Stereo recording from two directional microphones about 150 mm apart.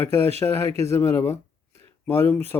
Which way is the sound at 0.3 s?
15° left (ahead or behind).